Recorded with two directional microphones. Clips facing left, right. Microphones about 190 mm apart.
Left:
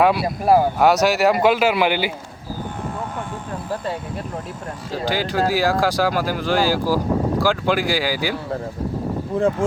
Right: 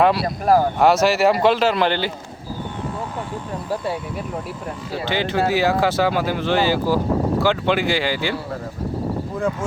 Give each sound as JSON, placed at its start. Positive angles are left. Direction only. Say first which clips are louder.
{"t": 0.0, "sound": "a man's voice", "louder": "even", "side_deg": 5}
{"t": 5.1, "sound": "a man's voice", "louder": "right 1 dB", "side_deg": 0}
{"t": 9.3, "sound": "speech", "louder": "left 5 dB", "side_deg": 30}